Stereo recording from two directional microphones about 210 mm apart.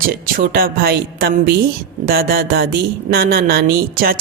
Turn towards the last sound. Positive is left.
turn(degrees=-45)  # may be behind; listen again after turning